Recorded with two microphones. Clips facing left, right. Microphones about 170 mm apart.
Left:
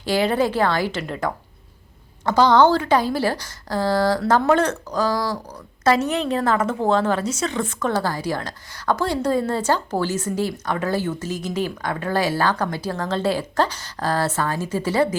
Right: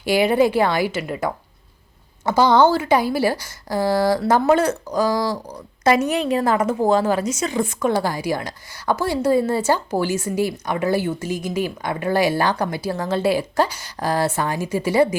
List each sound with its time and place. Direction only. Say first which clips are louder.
0.0 s a woman's voice: right 3 dB; 10° right (ahead or behind)